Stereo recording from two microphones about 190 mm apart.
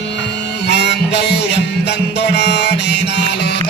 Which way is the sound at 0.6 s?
60° left (ahead or behind).